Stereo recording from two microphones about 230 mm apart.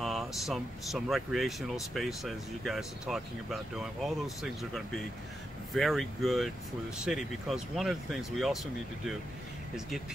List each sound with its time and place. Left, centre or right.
0.0 s speech: centre